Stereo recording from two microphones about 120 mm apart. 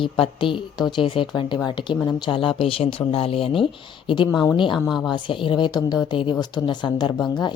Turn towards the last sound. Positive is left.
turn(degrees=40)  # may be behind; listen again after turning